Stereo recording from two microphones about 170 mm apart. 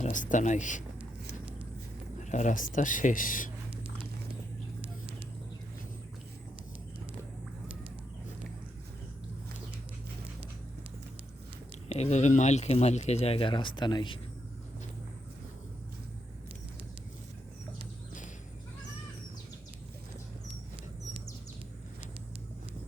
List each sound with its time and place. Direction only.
0.0 s speech: 50° left (ahead or behind)
2.1 s speech: 45° left (ahead or behind)
11.9 s speech: 40° left (ahead or behind)